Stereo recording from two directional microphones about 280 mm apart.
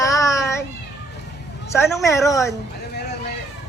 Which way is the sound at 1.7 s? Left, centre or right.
Centre.